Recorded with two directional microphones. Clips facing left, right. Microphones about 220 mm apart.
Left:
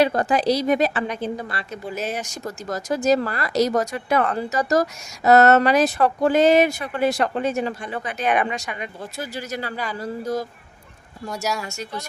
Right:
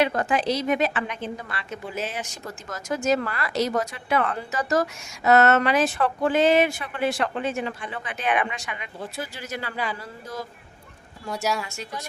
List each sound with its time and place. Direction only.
0.0 s a woman's voice: 35° left (ahead or behind)
11.6 s speech: 40° left (ahead or behind)